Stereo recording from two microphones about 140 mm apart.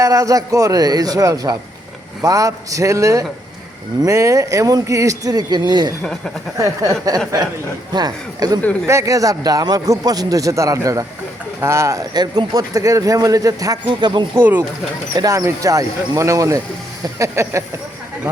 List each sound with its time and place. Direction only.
0.0 s speech: 25° right (ahead or behind)
6.0 s speech: 5° left (ahead or behind)
7.1 s speech: 25° right (ahead or behind)
14.3 s speech: 15° right (ahead or behind)